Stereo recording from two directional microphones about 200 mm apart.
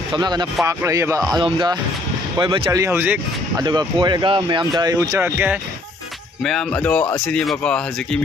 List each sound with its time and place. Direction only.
0.1 s speech: 20° right (ahead or behind)
6.4 s speech: 5° left (ahead or behind)